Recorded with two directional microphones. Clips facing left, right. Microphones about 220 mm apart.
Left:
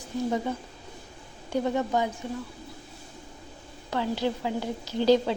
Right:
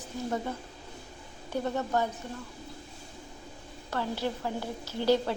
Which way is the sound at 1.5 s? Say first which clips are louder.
Left 4 dB; 10° left (ahead or behind).